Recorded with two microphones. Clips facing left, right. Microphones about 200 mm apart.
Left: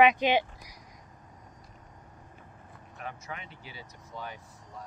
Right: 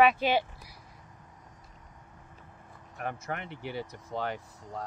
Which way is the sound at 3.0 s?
55° right (ahead or behind).